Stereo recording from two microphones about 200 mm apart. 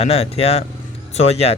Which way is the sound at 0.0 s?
30° left (ahead or behind).